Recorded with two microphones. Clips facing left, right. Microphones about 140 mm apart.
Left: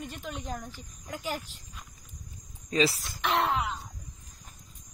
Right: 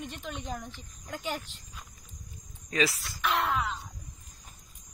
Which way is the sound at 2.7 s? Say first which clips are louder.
Left 3 dB; 30° left (ahead or behind).